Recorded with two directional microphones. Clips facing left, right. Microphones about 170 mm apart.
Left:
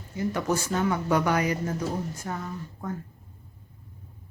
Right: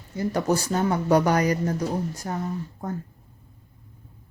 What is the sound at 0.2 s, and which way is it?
Speech, 35° right (ahead or behind).